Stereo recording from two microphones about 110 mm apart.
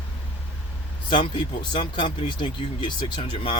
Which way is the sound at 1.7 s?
50° left (ahead or behind).